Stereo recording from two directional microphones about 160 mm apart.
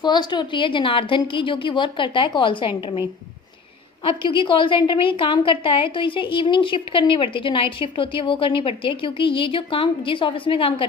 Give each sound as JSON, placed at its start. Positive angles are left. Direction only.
{"t": 0.0, "sound": "a woman's voice", "side_deg": 25}